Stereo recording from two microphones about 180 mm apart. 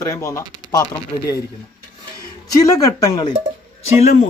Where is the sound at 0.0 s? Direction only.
20° left (ahead or behind).